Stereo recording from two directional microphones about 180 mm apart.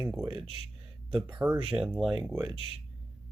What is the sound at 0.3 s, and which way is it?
Speech, 30° right (ahead or behind).